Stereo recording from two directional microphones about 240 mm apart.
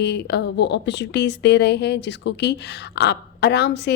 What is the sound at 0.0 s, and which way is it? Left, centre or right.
A woman's voice, left.